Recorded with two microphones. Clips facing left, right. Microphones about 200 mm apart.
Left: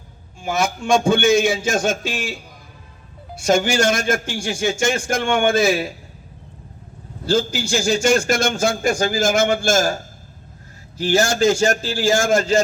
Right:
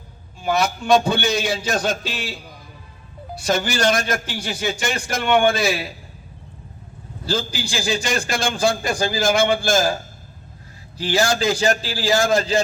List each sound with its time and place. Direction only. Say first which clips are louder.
0.4 s a man's voice: right 1 dB; 50° left (ahead or behind)
3.4 s a man's voice: left 3 dB; 45° left (ahead or behind)
7.3 s a man's voice: left 6 dB; 50° left (ahead or behind)
11.0 s a man's voice: left 3 dB; 45° left (ahead or behind)